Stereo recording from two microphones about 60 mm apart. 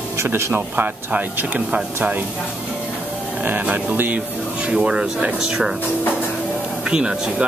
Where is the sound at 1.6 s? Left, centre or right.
Centre.